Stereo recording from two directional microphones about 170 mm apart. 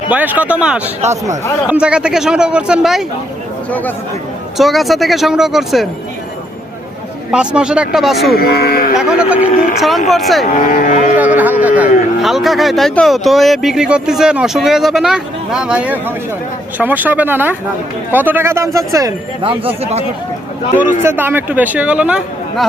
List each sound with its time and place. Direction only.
0.1 s speech: 10° right (ahead or behind)
1.0 s speech: 40° right (ahead or behind)
1.7 s speech: 5° right (ahead or behind)
3.7 s speech: 10° left (ahead or behind)
7.3 s speech: 5° right (ahead or behind)
8.4 s speech: 65° left (ahead or behind)
9.0 s speech: 5° right (ahead or behind)
10.4 s speech: 50° left (ahead or behind)
11.3 s a sound: 10° right (ahead or behind)
11.8 s speech: centre (ahead or behind); by 19.1 s 20° right (ahead or behind)
19.4 s speech: 30° right (ahead or behind)
21.0 s speech: 15° right (ahead or behind)